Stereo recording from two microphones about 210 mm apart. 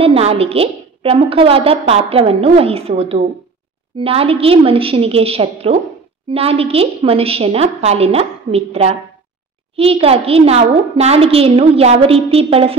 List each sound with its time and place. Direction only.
0.0 s a woman's voice: 30° right (ahead or behind)